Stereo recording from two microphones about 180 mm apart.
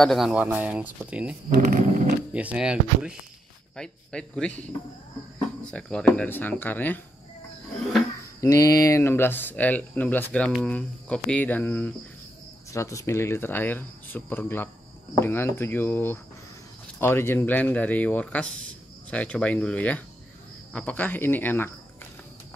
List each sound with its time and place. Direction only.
0.0 s speech: centre (ahead or behind)
1.5 s speech: 55° right (ahead or behind)
2.3 s speech: 5° right (ahead or behind); by 7.0 s 10° left (ahead or behind)
8.4 s speech: 20° left (ahead or behind)